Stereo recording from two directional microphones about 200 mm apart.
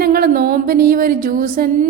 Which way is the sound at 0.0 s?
50° right (ahead or behind).